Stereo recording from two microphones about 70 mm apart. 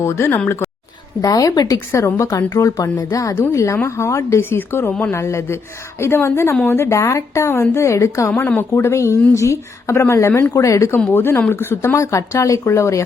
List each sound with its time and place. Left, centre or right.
0.0 s speech: left
1.2 s a woman's voice: left
2.3 s a woman's voice: left
4.4 s a woman's voice: left
11.1 s speech: left
11.9 s a woman's voice: left